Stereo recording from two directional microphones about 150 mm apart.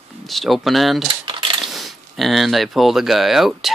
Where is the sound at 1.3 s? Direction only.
35° right (ahead or behind).